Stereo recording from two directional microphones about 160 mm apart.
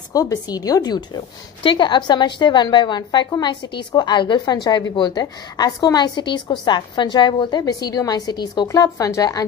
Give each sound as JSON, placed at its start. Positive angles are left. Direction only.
{"t": 0.1, "sound": "a woman's voice", "side_deg": 20}